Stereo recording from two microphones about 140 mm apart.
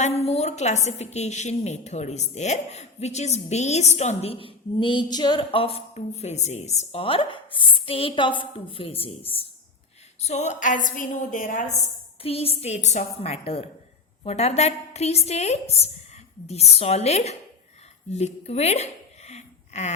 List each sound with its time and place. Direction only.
0.0 s a woman's voice: 50° left (ahead or behind); by 11.7 s 70° left (ahead or behind)
12.2 s a woman's voice: 45° left (ahead or behind)
18.1 s a sound: 50° left (ahead or behind)